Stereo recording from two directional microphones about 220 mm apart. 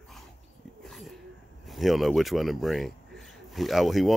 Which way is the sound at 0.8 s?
Centre (ahead or behind).